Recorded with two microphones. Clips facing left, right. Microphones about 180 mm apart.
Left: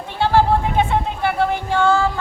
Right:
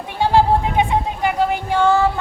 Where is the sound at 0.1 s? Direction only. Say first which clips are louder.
Right 1 dB; 15° right (ahead or behind).